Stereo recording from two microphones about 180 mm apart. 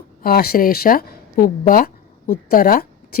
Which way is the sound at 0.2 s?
55° left (ahead or behind).